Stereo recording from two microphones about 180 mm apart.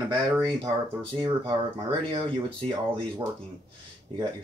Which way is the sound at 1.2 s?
25° right (ahead or behind).